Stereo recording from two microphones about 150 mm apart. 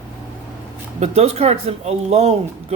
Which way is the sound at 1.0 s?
45° right (ahead or behind).